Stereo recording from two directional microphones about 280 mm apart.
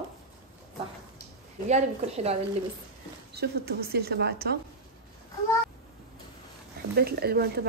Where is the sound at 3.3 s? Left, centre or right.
Right.